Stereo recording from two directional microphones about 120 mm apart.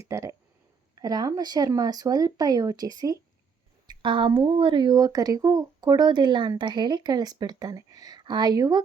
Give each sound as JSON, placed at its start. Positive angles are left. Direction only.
{"t": 0.0, "sound": "speech", "side_deg": -25}
{"t": 3.8, "sound": "a sound", "side_deg": -45}
{"t": 4.3, "sound": "speech", "side_deg": -40}